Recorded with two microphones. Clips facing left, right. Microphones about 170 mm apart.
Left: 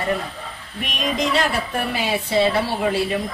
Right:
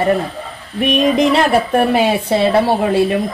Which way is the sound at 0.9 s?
60° right (ahead or behind).